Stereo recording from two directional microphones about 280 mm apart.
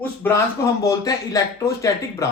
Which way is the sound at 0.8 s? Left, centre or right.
Centre.